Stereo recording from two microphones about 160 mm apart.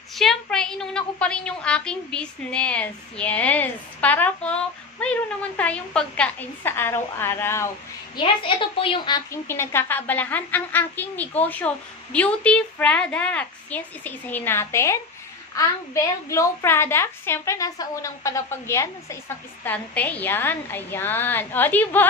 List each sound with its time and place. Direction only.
0.1 s a woman's voice: centre (ahead or behind)
8.2 s a woman's voice: 30° left (ahead or behind)
9.5 s a woman's voice: 15° left (ahead or behind)